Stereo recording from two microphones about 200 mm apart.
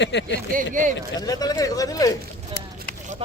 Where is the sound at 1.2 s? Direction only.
20° left (ahead or behind).